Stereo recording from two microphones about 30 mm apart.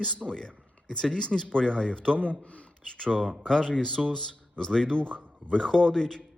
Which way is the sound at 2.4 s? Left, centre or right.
Left.